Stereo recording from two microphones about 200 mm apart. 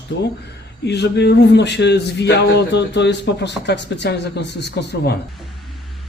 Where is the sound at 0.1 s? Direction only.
60° left (ahead or behind).